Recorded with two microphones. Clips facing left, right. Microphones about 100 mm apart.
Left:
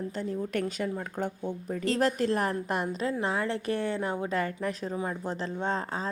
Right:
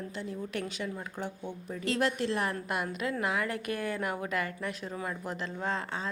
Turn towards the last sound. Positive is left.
turn(degrees=35)  # may be behind; listen again after turning